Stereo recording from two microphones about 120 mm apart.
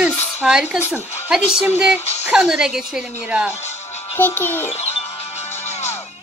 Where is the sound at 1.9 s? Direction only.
65° left (ahead or behind).